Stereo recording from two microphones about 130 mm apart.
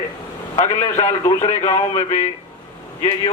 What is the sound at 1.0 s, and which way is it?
Speech, 25° left (ahead or behind).